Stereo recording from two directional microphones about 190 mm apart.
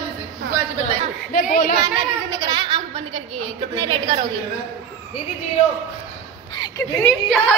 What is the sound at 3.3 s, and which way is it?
Speech, 25° right (ahead or behind).